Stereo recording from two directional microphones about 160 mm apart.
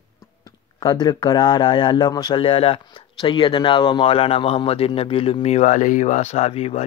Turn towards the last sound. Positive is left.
turn(degrees=40)  # may be behind; listen again after turning